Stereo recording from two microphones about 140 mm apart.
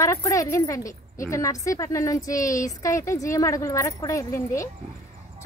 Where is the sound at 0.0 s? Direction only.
20° left (ahead or behind).